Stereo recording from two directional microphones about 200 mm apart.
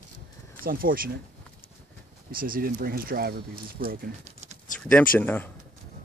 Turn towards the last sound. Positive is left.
turn(degrees=10)  # may be behind; listen again after turning